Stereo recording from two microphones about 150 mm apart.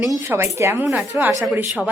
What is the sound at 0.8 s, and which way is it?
Speech, 5° right (ahead or behind).